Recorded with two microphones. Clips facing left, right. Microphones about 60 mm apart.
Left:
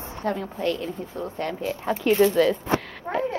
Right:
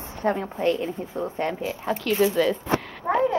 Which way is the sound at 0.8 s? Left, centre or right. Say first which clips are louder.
Right 2 dB; centre.